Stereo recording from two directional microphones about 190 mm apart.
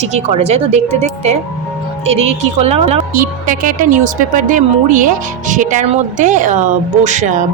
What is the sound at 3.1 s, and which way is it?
Speech, 50° right (ahead or behind).